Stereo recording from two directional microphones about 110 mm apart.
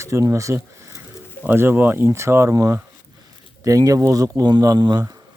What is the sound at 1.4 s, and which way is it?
Speech, 20° right (ahead or behind).